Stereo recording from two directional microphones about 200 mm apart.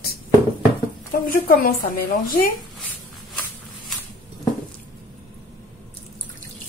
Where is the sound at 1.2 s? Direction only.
45° left (ahead or behind).